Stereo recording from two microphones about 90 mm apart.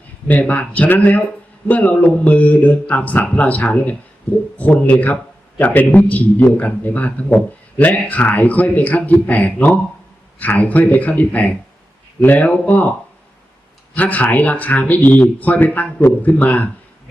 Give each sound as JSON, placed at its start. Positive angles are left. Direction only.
{"t": 0.3, "sound": "a man's voice", "side_deg": 15}
{"t": 13.9, "sound": "a man's voice", "side_deg": 15}